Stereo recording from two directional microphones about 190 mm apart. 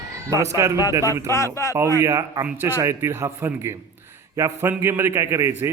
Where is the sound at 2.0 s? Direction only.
15° right (ahead or behind).